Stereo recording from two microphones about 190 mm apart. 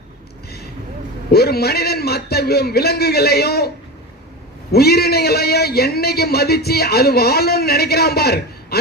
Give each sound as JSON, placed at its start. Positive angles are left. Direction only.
{"t": 1.3, "sound": "a man's voice", "side_deg": 55}
{"t": 4.7, "sound": "a man's voice", "side_deg": 55}